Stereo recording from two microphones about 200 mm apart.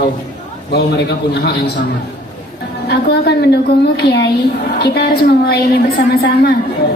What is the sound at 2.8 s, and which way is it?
A woman's voice, 55° left (ahead or behind).